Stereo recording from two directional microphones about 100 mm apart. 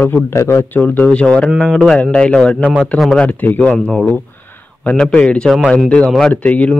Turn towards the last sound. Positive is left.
turn(degrees=15)  # may be behind; listen again after turning